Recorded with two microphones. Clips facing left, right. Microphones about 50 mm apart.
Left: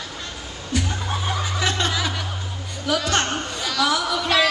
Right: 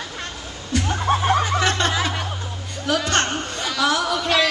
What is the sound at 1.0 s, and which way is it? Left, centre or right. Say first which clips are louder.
Snicker: right 7 dB; right.